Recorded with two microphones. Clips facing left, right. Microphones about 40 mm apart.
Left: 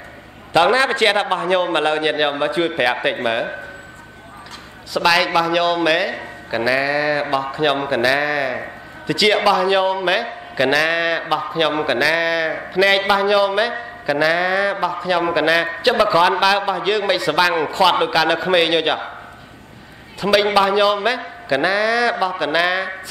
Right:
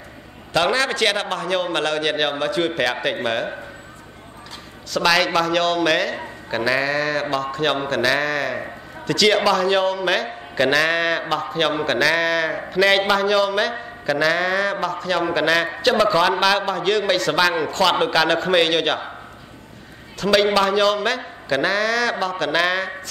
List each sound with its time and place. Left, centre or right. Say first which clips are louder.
0.5 s a man's voice: left 5 dB; centre
5.0 s a man's voice: left 2 dB; centre
10.5 s a man's voice: left 1 dB; centre
18.1 s a man's voice: left 1 dB; centre
20.2 s a man's voice: left 2 dB; centre